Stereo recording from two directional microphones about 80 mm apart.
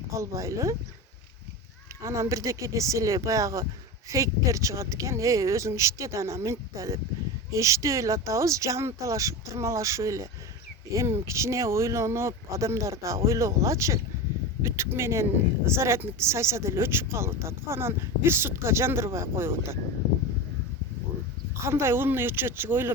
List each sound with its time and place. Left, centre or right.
0.2 s speech: right
2.0 s speech: right
21.6 s speech: right